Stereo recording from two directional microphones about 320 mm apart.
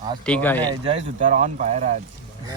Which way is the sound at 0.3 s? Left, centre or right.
Centre.